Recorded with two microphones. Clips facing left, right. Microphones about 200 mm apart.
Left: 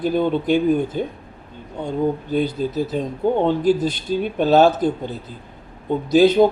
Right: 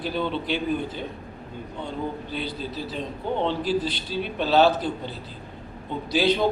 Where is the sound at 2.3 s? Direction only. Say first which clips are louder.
Left 10 dB; 45° left (ahead or behind).